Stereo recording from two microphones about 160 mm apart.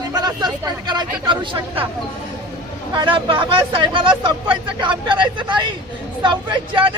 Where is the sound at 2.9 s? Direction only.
30° right (ahead or behind).